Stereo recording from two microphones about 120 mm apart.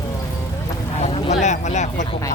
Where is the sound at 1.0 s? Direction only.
65° left (ahead or behind).